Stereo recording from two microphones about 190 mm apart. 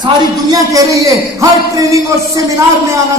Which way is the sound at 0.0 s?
20° right (ahead or behind).